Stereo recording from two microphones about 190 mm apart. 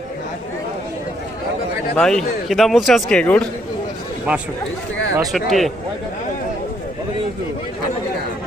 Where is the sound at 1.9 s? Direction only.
5° left (ahead or behind).